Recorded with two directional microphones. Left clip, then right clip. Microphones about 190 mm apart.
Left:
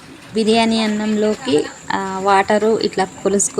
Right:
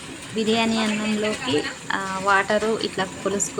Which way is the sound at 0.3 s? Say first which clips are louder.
Left 6 dB; 20° left (ahead or behind).